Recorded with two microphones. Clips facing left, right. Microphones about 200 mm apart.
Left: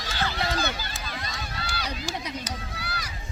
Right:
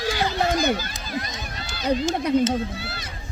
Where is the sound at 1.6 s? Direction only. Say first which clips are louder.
Right 1 dB; 20° right (ahead or behind).